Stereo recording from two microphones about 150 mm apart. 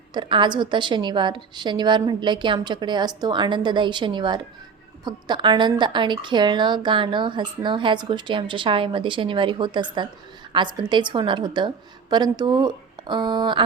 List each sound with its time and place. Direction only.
0.1 s a woman's voice: 30° right (ahead or behind)